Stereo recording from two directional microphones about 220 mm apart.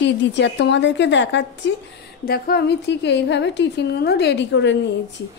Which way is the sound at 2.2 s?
45° left (ahead or behind).